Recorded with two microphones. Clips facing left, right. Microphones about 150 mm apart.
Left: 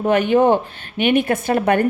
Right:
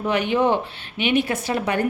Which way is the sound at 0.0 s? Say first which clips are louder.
Left 5 dB; 50° left (ahead or behind).